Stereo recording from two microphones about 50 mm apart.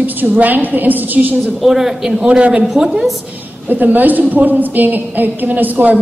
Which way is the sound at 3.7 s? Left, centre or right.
Right.